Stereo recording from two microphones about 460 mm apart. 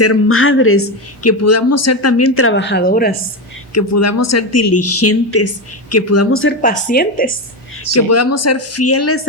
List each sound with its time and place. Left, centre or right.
0.0 s speech: left
3.8 s speech: left
6.6 s a woman's voice: centre
7.9 s speech: left